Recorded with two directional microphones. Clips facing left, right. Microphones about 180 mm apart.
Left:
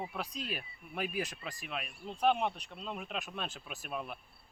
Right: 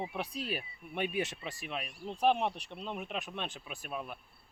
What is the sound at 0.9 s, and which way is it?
Speech, 25° right (ahead or behind).